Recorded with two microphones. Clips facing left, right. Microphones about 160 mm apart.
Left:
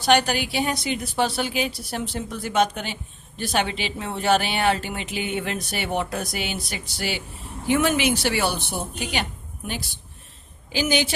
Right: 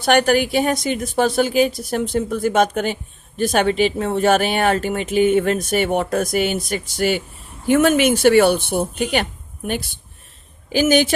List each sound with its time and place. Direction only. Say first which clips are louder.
0.0 s a woman's voice: right 5 dB; 50° right (ahead or behind)